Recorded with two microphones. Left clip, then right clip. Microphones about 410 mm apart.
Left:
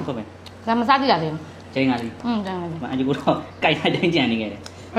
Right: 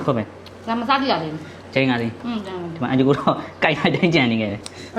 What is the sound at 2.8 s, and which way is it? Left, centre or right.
Speech, right.